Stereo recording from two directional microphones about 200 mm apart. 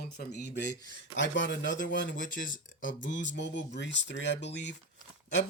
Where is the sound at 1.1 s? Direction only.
65° left (ahead or behind).